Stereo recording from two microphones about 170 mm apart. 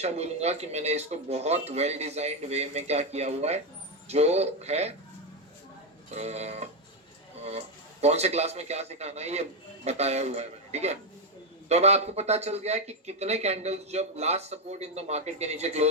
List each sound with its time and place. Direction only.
0.0 s speech: 40° right (ahead or behind)
6.1 s speech: 40° right (ahead or behind)
8.0 s speech: 40° right (ahead or behind)